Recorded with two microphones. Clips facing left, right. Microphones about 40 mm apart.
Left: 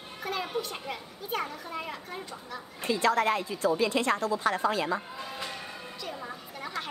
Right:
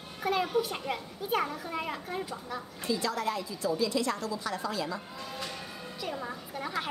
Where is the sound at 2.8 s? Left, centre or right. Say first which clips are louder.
Left 6 dB; left.